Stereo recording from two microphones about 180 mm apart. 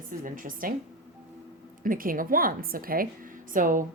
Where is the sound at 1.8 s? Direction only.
50° right (ahead or behind).